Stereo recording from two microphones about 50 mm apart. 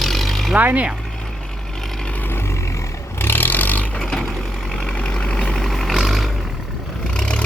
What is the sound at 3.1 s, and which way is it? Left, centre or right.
Vehicle, left.